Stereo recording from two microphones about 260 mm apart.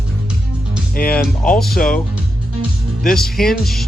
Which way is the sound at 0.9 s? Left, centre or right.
Left.